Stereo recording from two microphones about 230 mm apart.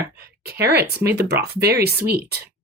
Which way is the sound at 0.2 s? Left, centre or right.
Right.